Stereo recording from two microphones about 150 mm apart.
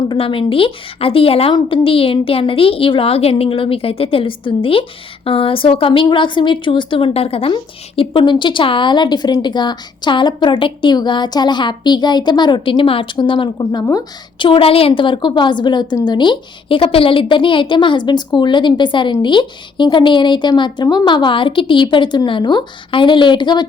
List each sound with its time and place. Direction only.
0.1 s a woman's voice: 35° left (ahead or behind)